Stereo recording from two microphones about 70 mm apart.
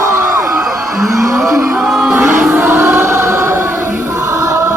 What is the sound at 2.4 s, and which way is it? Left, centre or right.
Music, right.